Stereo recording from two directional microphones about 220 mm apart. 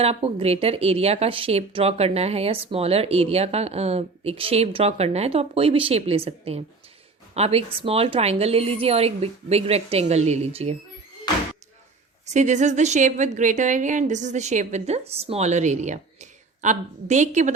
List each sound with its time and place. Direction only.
0.0 s speech: 25° right (ahead or behind)
12.2 s a woman's voice: 30° right (ahead or behind)